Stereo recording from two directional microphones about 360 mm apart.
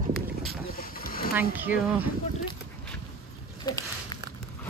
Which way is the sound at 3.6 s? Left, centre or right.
Centre.